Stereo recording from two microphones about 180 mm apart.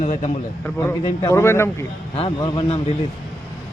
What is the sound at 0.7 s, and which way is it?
A man's voice, 15° left (ahead or behind).